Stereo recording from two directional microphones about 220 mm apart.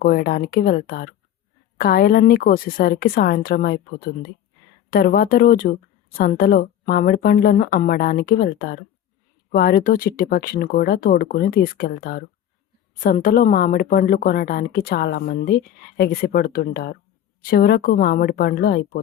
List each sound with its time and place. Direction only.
0.0 s a woman's voice: 40° left (ahead or behind)
4.9 s a woman's voice: 40° left (ahead or behind)